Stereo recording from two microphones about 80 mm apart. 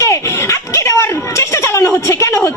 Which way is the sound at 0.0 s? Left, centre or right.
Left.